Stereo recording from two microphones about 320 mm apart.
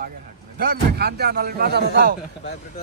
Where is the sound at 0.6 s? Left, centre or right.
Right.